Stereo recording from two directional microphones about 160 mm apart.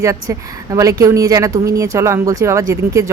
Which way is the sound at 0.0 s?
20° right (ahead or behind).